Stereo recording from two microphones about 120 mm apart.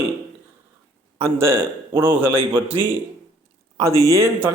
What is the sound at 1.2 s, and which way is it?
A man's voice, 20° right (ahead or behind).